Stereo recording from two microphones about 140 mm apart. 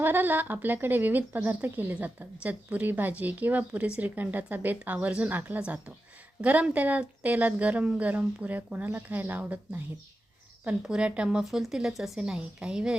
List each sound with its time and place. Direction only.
0.0 s speech: 15° right (ahead or behind)